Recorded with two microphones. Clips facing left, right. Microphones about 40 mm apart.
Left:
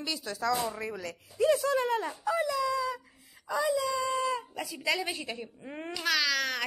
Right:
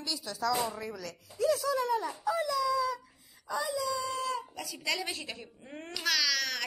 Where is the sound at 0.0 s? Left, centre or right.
Centre.